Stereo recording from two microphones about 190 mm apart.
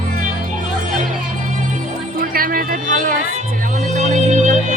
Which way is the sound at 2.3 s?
50° right (ahead or behind).